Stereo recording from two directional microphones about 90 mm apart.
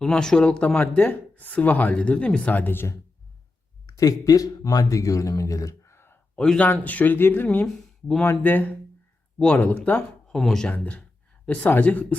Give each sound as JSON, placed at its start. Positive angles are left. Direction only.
{"t": 0.0, "sound": "a man's voice", "side_deg": 5}
{"t": 3.8, "sound": "speech", "side_deg": 40}
{"t": 6.3, "sound": "speech", "side_deg": 10}
{"t": 6.7, "sound": "speech", "side_deg": 20}
{"t": 7.4, "sound": "speech", "side_deg": 10}
{"t": 8.4, "sound": "speech", "side_deg": 20}
{"t": 10.2, "sound": "a man's voice", "side_deg": 5}